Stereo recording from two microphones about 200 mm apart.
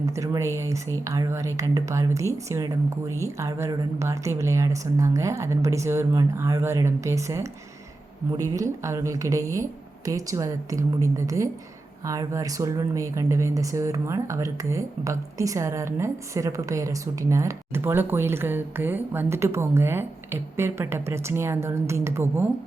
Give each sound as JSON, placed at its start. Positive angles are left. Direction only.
{"t": 0.0, "sound": "speech", "side_deg": -15}